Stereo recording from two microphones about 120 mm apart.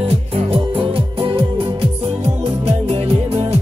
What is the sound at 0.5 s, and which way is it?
Music, 50° right (ahead or behind).